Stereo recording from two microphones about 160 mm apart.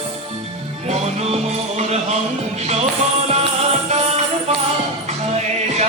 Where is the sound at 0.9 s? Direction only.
45° right (ahead or behind).